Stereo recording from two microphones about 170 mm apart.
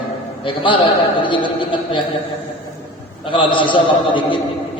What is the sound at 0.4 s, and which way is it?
A man's voice, 30° left (ahead or behind).